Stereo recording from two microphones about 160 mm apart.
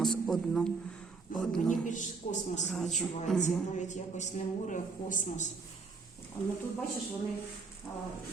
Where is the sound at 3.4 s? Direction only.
50° left (ahead or behind).